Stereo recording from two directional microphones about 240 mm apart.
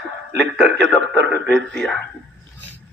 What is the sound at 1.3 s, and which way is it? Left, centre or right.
Speech, centre.